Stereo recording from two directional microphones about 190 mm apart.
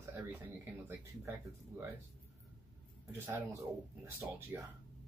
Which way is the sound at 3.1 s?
15° right (ahead or behind).